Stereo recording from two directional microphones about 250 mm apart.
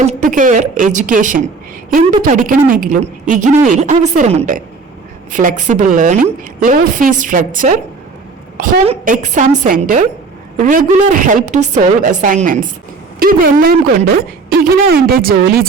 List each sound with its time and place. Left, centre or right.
0.0 s a woman's voice: right